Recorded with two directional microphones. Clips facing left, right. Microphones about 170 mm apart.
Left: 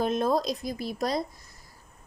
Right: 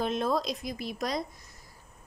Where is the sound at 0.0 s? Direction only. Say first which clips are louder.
Left 3 dB; 45° left (ahead or behind).